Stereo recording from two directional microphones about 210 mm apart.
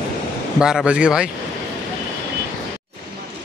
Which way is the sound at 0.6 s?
5° right (ahead or behind).